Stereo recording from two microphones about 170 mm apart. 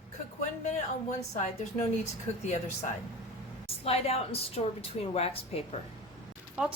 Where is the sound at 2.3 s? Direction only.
40° left (ahead or behind).